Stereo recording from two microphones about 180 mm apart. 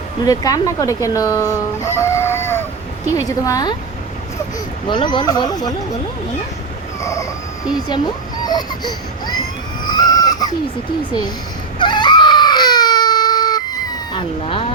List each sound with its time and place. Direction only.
0.3 s speech: 20° left (ahead or behind)
4.9 s speech: 25° left (ahead or behind)
7.0 s a sound: 15° left (ahead or behind)
7.9 s speech: 25° left (ahead or behind)
8.4 s baby cry: 25° left (ahead or behind)
9.8 s chicken: 25° left (ahead or behind)
11.8 s baby cry: 25° left (ahead or behind)
14.1 s speech: 30° left (ahead or behind)